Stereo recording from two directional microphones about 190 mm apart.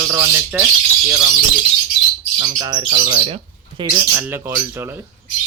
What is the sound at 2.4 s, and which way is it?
Speech, 20° right (ahead or behind).